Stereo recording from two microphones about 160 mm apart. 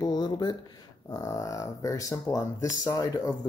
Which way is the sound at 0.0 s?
25° left (ahead or behind).